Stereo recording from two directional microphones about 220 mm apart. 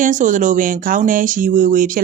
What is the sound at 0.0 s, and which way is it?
Speech, 35° right (ahead or behind).